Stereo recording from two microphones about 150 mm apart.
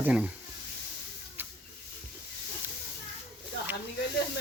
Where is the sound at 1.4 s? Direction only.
15° right (ahead or behind).